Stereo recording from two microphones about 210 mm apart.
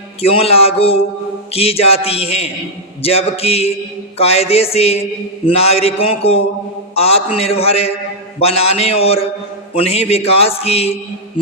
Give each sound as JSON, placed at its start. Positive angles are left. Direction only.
{"t": 0.2, "sound": "a man's voice", "side_deg": 30}